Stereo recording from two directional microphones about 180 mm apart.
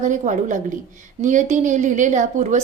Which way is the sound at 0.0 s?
45° right (ahead or behind).